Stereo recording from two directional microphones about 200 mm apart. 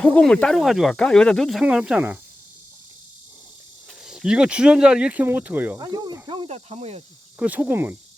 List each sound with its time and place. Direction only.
0.0 s speech: 5° left (ahead or behind)
4.0 s speech: 5° right (ahead or behind)
5.8 s speech: 20° right (ahead or behind)
7.3 s cricket: 5° right (ahead or behind)